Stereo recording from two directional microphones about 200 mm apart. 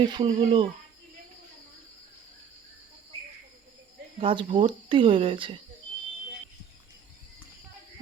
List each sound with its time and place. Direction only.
0.0 s speech: 25° right (ahead or behind)
4.2 s speech: 25° right (ahead or behind)